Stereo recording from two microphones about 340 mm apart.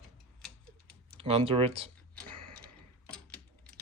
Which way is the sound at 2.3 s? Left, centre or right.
Centre.